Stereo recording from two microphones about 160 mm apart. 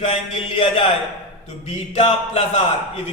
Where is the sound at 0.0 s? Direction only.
35° left (ahead or behind).